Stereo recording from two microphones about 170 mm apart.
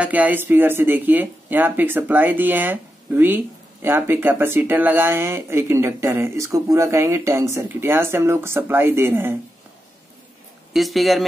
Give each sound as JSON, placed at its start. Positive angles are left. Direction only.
{"t": 0.0, "sound": "speech", "side_deg": -10}
{"t": 10.7, "sound": "speech", "side_deg": 0}